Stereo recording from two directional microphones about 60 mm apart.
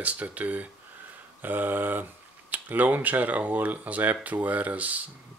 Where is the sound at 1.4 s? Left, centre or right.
Right.